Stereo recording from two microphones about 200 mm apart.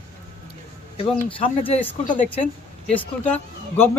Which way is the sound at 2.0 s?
40° left (ahead or behind).